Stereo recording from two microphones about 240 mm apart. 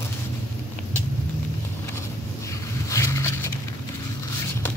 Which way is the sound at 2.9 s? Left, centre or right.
Centre.